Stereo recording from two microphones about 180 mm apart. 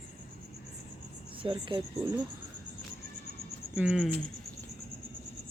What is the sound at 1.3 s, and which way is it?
Speech, 30° right (ahead or behind).